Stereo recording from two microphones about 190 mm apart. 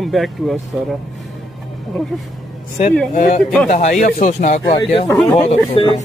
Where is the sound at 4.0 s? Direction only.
40° left (ahead or behind).